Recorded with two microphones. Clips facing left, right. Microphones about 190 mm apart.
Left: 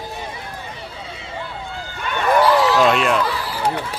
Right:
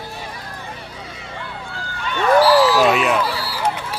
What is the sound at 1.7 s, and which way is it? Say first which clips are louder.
Run: left 1 dB; 20° left (ahead or behind).